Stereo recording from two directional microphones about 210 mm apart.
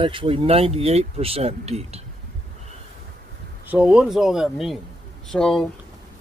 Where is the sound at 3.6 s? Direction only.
5° right (ahead or behind).